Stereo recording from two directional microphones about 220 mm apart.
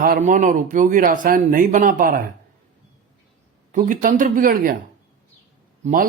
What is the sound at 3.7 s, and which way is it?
Speech, 35° right (ahead or behind).